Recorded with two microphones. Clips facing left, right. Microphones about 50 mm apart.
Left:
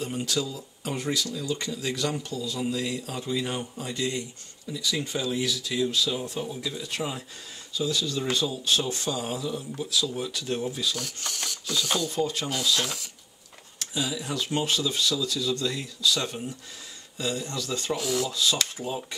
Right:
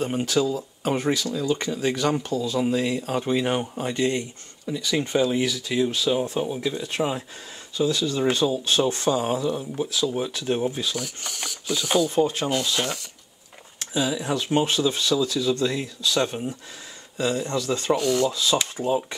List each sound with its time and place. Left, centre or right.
0.0 s speech: right
11.2 s ratchet: centre
12.1 s speech: right
12.8 s speech: centre
13.7 s speech: right
17.9 s speech: centre
18.3 s speech: right